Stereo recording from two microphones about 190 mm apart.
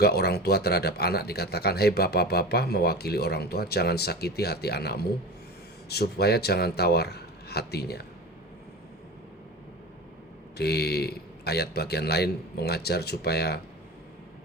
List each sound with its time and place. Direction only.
0.0 s speech: 55° left (ahead or behind)
10.6 s speech: 60° left (ahead or behind)